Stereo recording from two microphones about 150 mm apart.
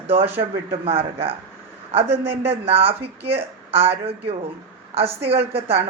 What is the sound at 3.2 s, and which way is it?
Speech, 15° right (ahead or behind).